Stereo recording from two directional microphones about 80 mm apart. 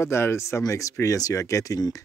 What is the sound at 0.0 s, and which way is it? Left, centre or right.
Speech, left.